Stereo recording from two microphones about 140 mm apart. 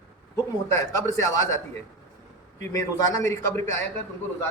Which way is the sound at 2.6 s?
25° left (ahead or behind).